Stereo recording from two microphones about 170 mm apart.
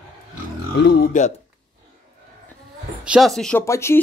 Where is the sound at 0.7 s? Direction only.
75° left (ahead or behind).